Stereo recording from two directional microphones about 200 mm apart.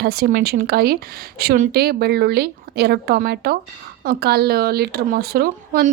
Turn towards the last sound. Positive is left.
turn(degrees=-50)  # may be behind; listen again after turning